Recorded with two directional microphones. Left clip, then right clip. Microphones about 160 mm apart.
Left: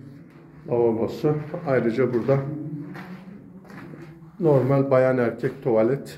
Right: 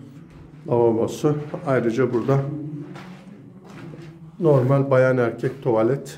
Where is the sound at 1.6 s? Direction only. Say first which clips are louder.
Right 1 dB; 10° right (ahead or behind).